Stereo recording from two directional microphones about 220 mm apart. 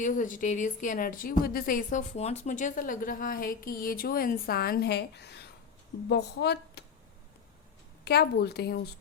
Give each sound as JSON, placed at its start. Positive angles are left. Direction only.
{"t": 0.0, "sound": "a woman's voice", "side_deg": 35}
{"t": 8.0, "sound": "a woman's voice", "side_deg": 45}